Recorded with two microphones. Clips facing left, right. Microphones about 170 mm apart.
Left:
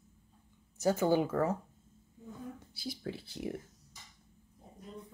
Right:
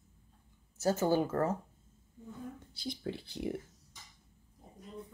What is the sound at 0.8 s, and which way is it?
Speech, 15° left (ahead or behind).